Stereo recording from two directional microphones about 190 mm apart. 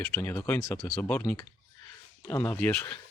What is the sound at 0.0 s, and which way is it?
Speech, 10° left (ahead or behind).